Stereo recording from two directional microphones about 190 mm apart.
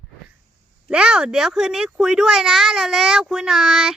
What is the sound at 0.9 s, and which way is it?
Speech, 5° right (ahead or behind).